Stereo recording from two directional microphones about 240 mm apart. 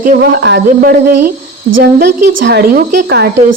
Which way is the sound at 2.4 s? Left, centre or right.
Right.